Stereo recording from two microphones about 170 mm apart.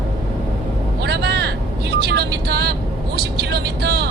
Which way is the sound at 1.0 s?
75° right (ahead or behind).